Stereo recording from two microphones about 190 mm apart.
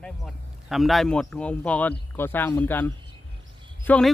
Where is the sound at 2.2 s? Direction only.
10° left (ahead or behind).